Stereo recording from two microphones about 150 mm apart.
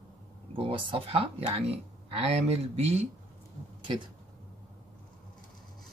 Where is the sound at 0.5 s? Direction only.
35° right (ahead or behind).